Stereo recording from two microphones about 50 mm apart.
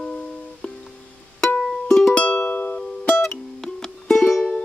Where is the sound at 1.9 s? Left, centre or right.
Centre.